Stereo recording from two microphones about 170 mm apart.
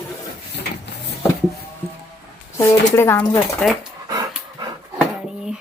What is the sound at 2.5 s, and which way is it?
Speech, 15° left (ahead or behind).